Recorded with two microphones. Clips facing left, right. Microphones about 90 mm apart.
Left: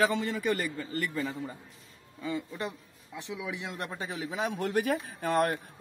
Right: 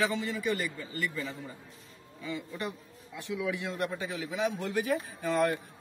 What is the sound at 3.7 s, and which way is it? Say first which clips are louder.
Speech: right 3 dB; 35° left (ahead or behind).